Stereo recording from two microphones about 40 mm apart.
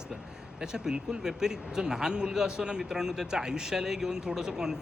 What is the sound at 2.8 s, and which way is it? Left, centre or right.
Speech, centre.